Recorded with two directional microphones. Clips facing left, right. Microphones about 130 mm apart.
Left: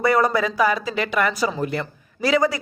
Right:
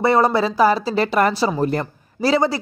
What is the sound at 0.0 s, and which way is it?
Speech, 30° right (ahead or behind).